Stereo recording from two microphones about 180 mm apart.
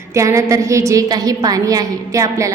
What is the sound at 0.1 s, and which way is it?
A woman's voice, 15° right (ahead or behind).